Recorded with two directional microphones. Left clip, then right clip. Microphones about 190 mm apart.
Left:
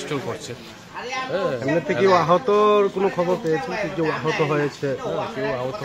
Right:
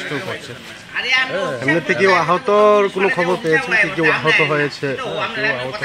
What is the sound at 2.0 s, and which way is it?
Speech, 45° right (ahead or behind).